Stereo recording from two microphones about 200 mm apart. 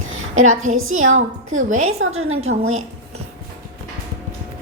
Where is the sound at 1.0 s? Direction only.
85° right.